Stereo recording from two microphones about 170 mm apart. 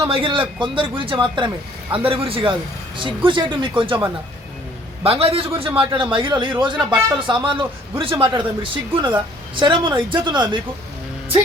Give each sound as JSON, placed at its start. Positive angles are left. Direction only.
{"t": 0.1, "sound": "a man's voice", "side_deg": -30}
{"t": 5.0, "sound": "a man's voice", "side_deg": -35}